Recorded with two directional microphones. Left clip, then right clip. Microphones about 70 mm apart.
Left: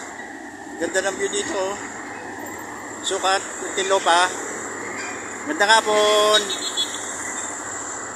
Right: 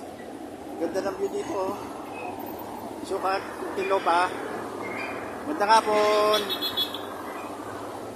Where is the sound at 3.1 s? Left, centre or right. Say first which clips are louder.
Left 6 dB; left.